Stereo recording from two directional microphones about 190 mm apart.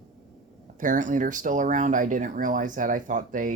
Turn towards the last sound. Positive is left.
turn(degrees=-45)  # may be behind; listen again after turning